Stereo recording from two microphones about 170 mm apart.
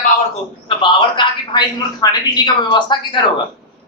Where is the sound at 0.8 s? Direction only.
30° left (ahead or behind).